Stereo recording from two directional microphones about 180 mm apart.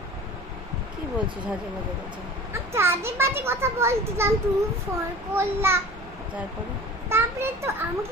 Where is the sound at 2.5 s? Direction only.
15° right (ahead or behind).